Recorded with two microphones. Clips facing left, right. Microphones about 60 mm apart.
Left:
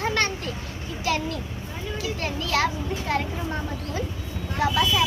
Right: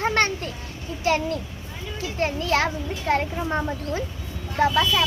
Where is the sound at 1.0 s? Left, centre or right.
Right.